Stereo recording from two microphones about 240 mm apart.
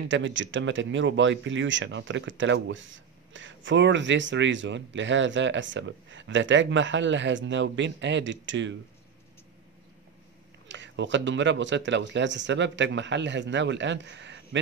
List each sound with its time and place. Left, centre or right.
0.1 s speech: right
10.7 s speech: right